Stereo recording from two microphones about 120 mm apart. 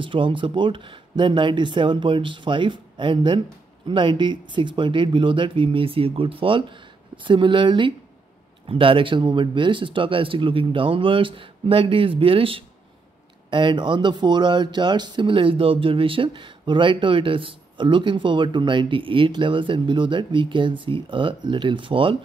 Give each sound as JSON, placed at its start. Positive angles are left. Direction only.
{"t": 0.0, "sound": "speech", "side_deg": -45}